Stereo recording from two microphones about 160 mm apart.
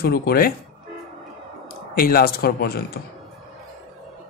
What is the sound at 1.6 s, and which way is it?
Speech, 65° left (ahead or behind).